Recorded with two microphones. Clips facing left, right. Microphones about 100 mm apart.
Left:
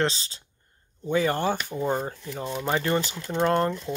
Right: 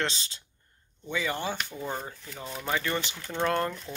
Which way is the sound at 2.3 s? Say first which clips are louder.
Left 5 dB; 30° left (ahead or behind).